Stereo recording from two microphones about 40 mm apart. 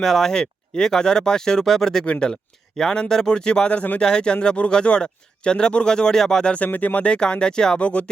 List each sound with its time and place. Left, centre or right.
0.0 s speech: centre
2.0 s speech: left
2.3 s speech: centre
6.4 s speech: left
6.7 s speech: left
7.0 s speech: left
7.8 s speech: left